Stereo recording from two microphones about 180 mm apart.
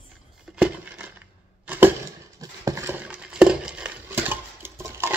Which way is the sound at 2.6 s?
15° right (ahead or behind).